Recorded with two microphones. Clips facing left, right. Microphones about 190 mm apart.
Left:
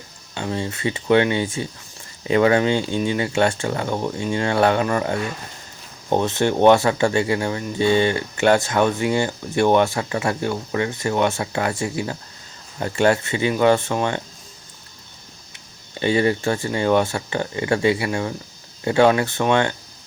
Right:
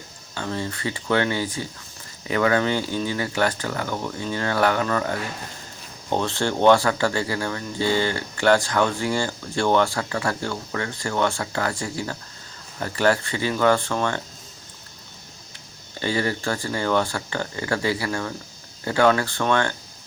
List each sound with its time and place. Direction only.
0.3 s speech: 20° left (ahead or behind)
16.0 s speech: 20° left (ahead or behind)